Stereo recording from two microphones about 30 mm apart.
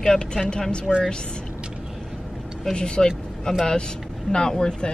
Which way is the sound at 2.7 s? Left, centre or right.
Left.